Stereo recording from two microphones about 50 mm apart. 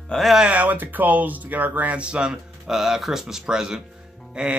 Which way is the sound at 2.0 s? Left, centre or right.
Right.